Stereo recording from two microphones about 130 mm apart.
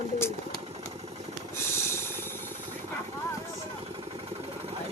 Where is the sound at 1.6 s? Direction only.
20° left (ahead or behind).